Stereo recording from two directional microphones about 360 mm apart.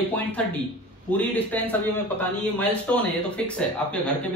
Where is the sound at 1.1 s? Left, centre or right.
Centre.